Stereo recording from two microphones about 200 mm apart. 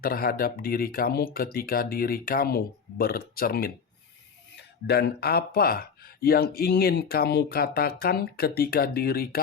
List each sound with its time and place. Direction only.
0.0 s speech: 45° left (ahead or behind)